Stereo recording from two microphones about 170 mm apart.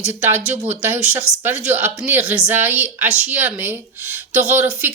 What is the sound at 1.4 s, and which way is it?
A woman's voice, 10° right (ahead or behind).